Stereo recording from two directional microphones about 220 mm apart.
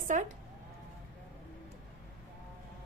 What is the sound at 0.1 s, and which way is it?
Speech, 35° right (ahead or behind).